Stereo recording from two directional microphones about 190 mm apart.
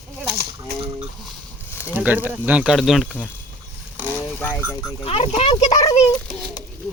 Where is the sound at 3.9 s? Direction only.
10° right (ahead or behind).